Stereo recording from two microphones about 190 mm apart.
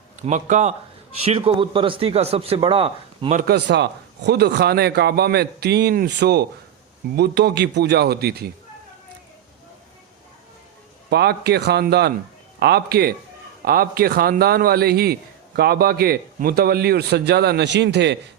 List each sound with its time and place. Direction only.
0.2 s a man's voice: 40° right (ahead or behind)
3.3 s a man's voice: 55° right (ahead or behind)
11.1 s a man's voice: 60° right (ahead or behind)